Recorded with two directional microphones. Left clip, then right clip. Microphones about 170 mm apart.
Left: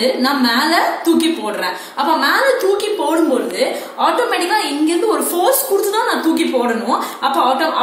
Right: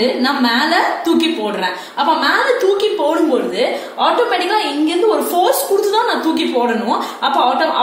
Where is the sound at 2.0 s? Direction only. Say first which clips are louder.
Even; 45° right (ahead or behind).